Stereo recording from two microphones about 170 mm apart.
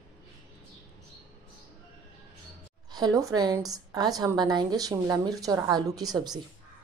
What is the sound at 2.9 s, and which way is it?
A woman's voice, 20° right (ahead or behind).